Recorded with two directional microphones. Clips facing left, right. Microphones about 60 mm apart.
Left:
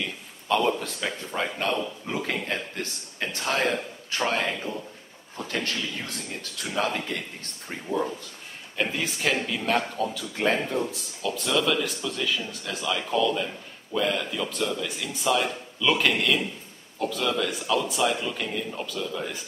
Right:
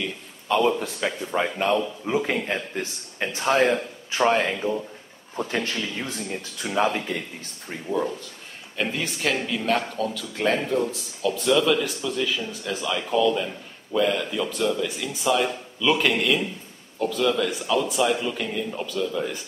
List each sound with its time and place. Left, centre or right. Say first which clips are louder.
0.5 s a man's voice: right 3 dB; centre
7.6 s speech: right 2 dB; centre